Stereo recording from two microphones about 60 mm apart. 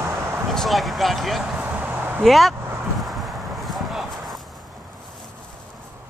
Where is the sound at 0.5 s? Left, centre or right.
Centre.